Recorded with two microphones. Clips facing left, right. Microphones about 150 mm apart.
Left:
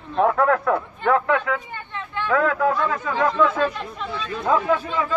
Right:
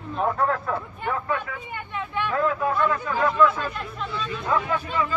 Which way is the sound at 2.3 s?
90° left.